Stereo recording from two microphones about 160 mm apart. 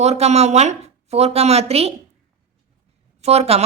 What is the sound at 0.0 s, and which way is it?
A woman's voice, 45° right (ahead or behind).